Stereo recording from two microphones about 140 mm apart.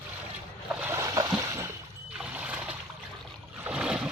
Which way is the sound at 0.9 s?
25° right (ahead or behind).